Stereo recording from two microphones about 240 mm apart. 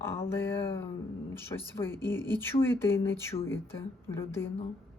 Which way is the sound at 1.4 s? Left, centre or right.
Centre.